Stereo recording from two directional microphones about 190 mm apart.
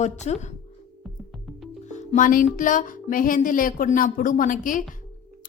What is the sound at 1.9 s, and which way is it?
Music, 40° left (ahead or behind).